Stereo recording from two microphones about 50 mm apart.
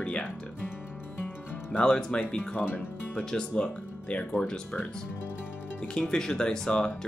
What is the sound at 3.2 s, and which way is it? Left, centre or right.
Speech, centre.